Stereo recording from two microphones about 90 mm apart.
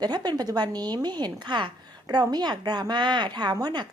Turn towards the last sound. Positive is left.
turn(degrees=-50)  # may be behind; listen again after turning